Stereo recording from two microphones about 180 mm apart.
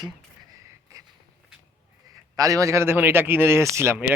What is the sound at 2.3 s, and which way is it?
Speech, 20° right (ahead or behind).